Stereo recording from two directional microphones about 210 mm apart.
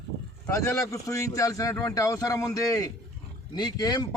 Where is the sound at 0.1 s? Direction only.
50° right (ahead or behind).